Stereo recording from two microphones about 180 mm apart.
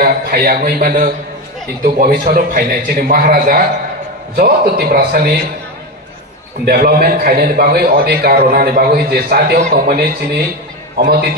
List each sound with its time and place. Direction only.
0.0 s a man's voice: 55° right (ahead or behind)
6.6 s a man's voice: 55° right (ahead or behind)
9.6 s a man's voice: 45° right (ahead or behind); by 11.2 s 65° right (ahead or behind)